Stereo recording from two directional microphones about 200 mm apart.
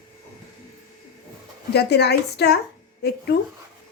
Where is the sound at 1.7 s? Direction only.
55° left (ahead or behind).